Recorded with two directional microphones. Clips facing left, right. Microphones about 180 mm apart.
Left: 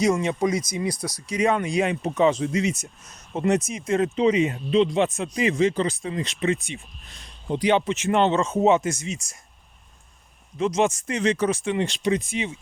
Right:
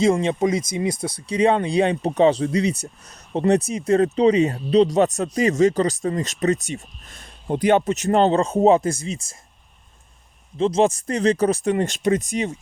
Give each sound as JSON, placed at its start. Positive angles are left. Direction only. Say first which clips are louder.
{"t": 0.0, "sound": "speech", "louder": "right 3 dB", "side_deg": -25}
{"t": 10.6, "sound": "speech", "louder": "right 4 dB", "side_deg": -30}